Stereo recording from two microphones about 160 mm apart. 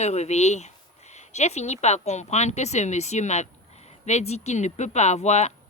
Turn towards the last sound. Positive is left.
turn(degrees=45)  # may be behind; listen again after turning